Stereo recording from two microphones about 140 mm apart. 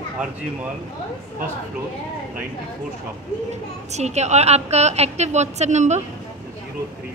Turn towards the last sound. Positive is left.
turn(degrees=-55)  # may be behind; listen again after turning